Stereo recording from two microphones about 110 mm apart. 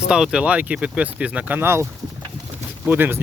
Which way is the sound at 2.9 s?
20° right (ahead or behind).